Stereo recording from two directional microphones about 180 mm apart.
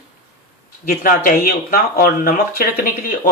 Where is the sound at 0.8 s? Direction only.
55° left (ahead or behind).